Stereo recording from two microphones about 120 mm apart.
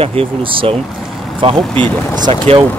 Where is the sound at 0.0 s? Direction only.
50° right (ahead or behind).